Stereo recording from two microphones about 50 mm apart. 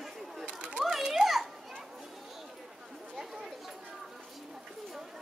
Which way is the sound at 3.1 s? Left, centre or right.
Centre.